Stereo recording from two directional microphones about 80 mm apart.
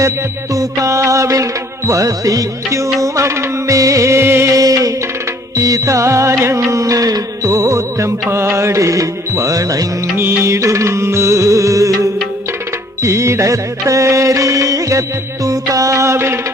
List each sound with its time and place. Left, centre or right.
0.5 s music: right
10.2 s music: right
13.0 s music: right